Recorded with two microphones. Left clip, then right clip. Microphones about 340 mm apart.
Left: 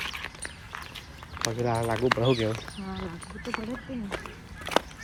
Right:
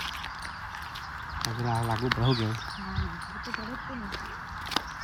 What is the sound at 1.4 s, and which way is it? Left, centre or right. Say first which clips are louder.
Speech: left 4 dB; centre.